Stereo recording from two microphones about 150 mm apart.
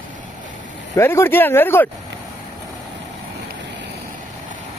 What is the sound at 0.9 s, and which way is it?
Speech, 15° left (ahead or behind).